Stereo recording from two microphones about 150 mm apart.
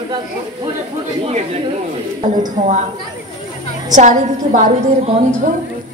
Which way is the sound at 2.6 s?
55° right (ahead or behind).